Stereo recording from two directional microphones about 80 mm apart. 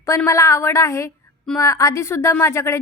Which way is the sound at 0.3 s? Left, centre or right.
Left.